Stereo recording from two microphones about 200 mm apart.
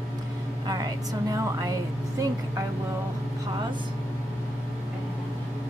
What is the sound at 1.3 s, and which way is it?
Speech, 15° right (ahead or behind).